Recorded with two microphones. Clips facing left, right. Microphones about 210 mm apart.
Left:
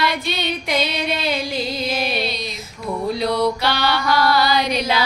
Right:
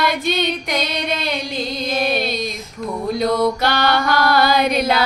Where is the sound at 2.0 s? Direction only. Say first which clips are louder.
Right 4 dB; 45° right (ahead or behind).